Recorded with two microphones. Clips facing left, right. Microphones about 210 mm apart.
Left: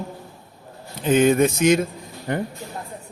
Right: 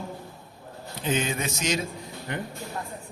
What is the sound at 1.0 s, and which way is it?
Speech, 55° left (ahead or behind).